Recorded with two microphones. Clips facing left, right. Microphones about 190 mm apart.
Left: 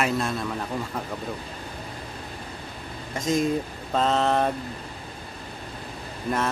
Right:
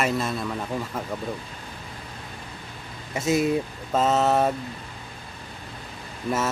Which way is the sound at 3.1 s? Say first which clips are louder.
Right 2 dB; 10° right (ahead or behind).